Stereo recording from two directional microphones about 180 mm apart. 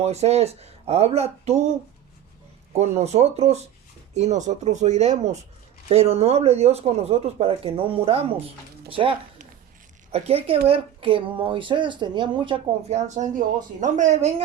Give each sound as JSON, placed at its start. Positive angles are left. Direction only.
{"t": 0.0, "sound": "speech", "side_deg": -35}
{"t": 2.7, "sound": "speech", "side_deg": -35}